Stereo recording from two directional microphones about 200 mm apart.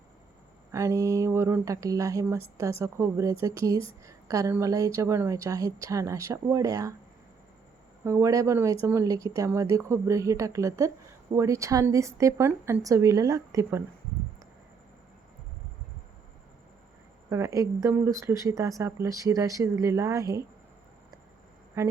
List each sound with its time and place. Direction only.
0.7 s a woman's voice: 15° right (ahead or behind)
8.0 s a woman's voice: 15° right (ahead or behind)
17.2 s a woman's voice: 15° right (ahead or behind)
21.8 s a woman's voice: 15° right (ahead or behind)